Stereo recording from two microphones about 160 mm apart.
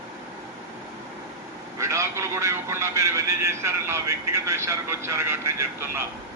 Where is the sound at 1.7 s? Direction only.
20° right (ahead or behind).